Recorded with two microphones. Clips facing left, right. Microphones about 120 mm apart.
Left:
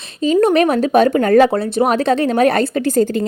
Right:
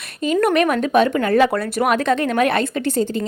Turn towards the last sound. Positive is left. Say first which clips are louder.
# left 4 dB
turn(degrees=40)  # may be behind; listen again after turning